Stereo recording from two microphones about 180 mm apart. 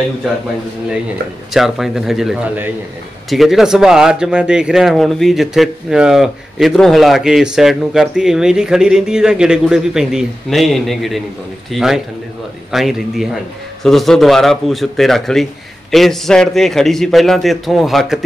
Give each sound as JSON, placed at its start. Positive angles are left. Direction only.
{"t": 1.5, "sound": "speech", "side_deg": 0}